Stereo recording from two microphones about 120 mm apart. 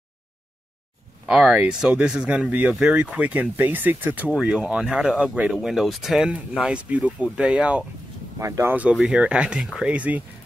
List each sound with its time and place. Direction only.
1.2 s speech: 10° right (ahead or behind)
8.4 s speech: 25° right (ahead or behind)
8.9 s speech: 5° right (ahead or behind)